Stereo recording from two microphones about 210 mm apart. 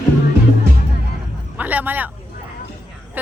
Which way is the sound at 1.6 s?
10° right (ahead or behind).